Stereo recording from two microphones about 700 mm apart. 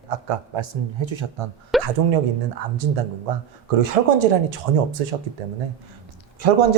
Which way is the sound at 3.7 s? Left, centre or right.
Right.